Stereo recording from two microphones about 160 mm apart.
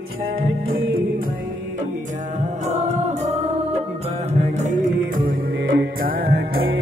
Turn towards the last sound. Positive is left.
turn(degrees=-70)  # may be behind; listen again after turning